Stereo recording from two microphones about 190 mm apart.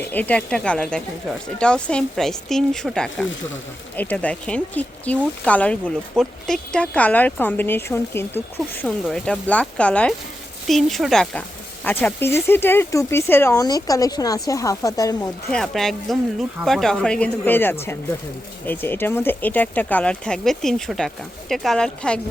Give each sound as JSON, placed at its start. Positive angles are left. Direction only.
{"t": 0.1, "sound": "speech", "side_deg": 10}
{"t": 15.4, "sound": "speech", "side_deg": 5}